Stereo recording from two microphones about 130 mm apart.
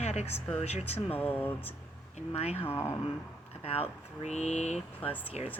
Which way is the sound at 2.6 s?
20° left (ahead or behind).